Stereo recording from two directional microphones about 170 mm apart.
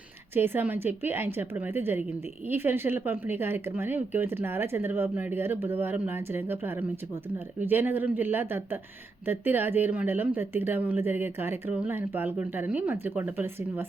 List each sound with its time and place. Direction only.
0.3 s speech: 15° right (ahead or behind)